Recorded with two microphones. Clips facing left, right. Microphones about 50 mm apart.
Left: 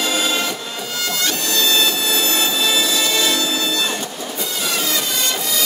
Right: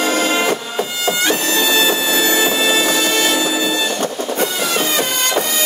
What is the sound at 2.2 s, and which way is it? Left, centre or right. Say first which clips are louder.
Music: right 7 dB; right.